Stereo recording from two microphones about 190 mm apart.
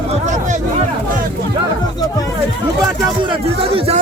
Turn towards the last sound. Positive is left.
turn(degrees=-25)  # may be behind; listen again after turning